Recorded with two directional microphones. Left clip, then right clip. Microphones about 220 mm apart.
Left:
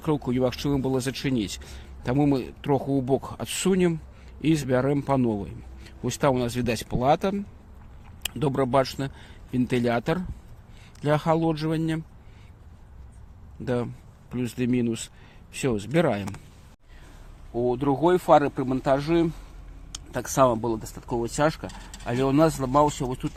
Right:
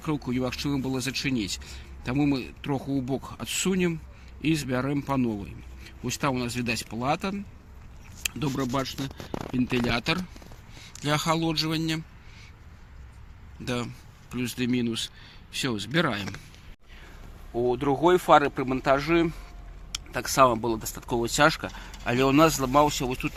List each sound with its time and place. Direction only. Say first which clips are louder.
0.3 s a man's voice: left 4 dB; 40° left (ahead or behind)
13.7 s speech: left 4 dB; 40° left (ahead or behind)
17.6 s speech: even; 30° left (ahead or behind)
19.9 s a sound: even; 30° left (ahead or behind)
20.3 s speech: even; 25° left (ahead or behind)